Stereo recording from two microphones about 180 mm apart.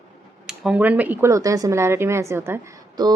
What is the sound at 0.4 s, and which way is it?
A woman's voice, 5° right (ahead or behind).